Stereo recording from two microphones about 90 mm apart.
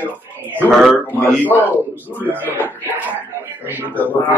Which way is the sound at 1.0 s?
20° left (ahead or behind).